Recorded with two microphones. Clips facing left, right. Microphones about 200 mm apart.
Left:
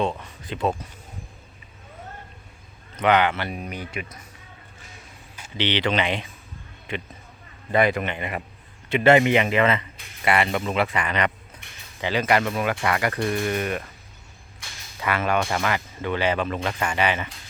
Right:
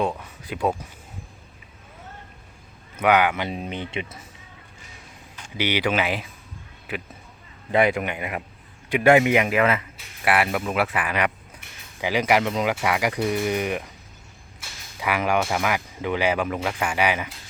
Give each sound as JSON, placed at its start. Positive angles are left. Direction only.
{"t": 0.0, "sound": "speech", "side_deg": -5}
{"t": 2.9, "sound": "a man's voice", "side_deg": -10}
{"t": 5.5, "sound": "speech", "side_deg": -10}